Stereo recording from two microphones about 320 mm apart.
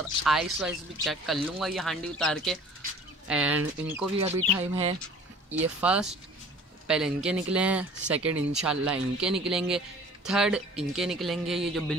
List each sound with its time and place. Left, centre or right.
0.2 s speech: centre
5.6 s speech: centre